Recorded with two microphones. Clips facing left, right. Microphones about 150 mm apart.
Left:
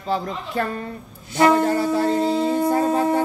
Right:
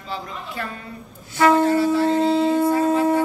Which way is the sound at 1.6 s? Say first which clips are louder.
Right 2 dB; 45° left (ahead or behind).